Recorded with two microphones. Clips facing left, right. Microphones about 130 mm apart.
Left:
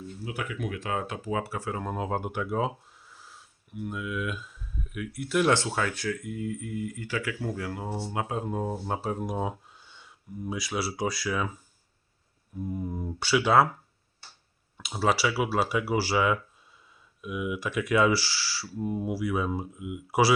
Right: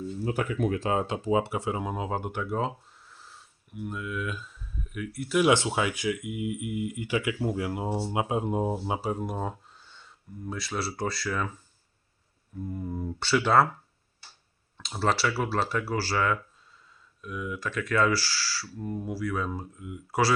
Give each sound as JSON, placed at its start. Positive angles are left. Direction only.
{"t": 0.3, "sound": "speech", "side_deg": -40}
{"t": 1.8, "sound": "speech", "side_deg": 0}
{"t": 5.5, "sound": "speech", "side_deg": -15}
{"t": 8.9, "sound": "speech", "side_deg": -5}
{"t": 14.8, "sound": "speech", "side_deg": 5}